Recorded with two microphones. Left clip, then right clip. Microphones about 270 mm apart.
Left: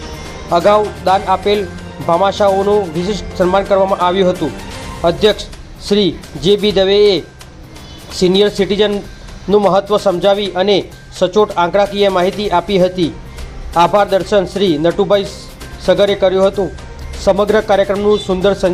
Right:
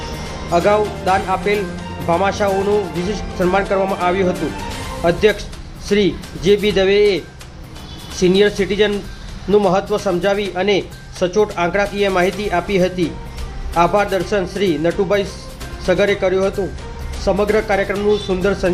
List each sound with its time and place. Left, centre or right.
0.5 s speech: centre
8.2 s speech: centre